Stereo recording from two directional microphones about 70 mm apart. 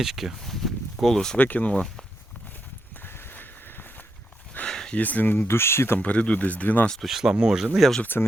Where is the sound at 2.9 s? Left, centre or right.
Left.